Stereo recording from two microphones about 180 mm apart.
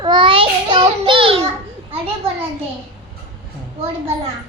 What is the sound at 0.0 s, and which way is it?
Child singing, 25° right (ahead or behind).